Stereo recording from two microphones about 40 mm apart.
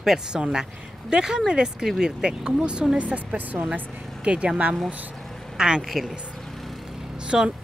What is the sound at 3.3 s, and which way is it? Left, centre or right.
Speech, right.